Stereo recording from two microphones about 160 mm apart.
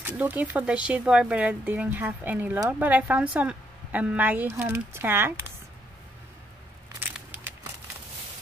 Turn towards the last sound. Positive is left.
turn(degrees=-10)  # may be behind; listen again after turning